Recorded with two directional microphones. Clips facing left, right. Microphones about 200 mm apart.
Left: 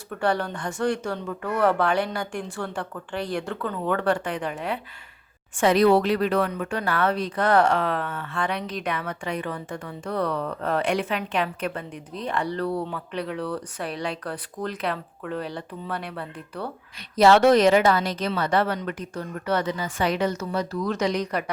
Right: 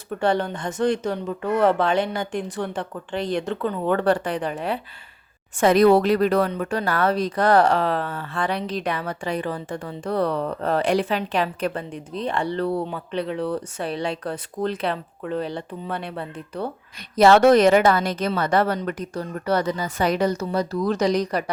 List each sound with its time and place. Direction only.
0.1 s speech: 25° right (ahead or behind)
5.5 s speech: 45° right (ahead or behind); by 16.6 s 25° right (ahead or behind)
17.2 s speech: 50° right (ahead or behind); by 21.5 s 35° right (ahead or behind)